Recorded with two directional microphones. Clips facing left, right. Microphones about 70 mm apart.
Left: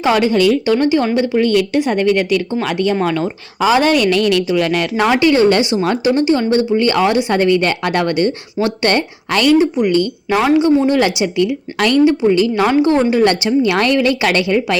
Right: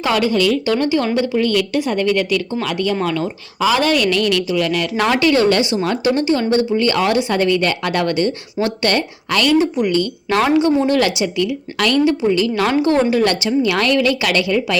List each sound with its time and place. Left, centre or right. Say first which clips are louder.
0.0 s a woman's voice: left 3 dB; left
4.9 s a woman's voice: left 3 dB; centre; by 14.8 s left